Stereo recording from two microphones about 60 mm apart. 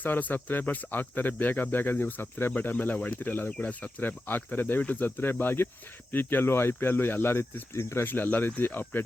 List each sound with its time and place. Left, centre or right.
0.0 s speech: left
8.0 s speech: left